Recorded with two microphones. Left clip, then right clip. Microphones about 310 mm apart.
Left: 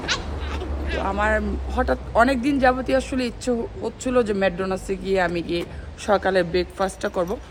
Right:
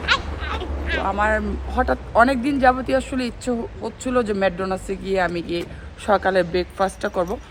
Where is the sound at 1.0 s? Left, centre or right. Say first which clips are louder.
Right 1 dB; centre.